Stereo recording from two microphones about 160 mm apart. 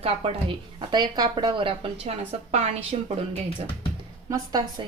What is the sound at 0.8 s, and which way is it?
Speech, 30° right (ahead or behind).